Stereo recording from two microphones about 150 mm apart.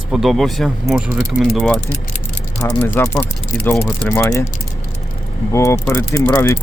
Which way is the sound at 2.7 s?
15° left (ahead or behind).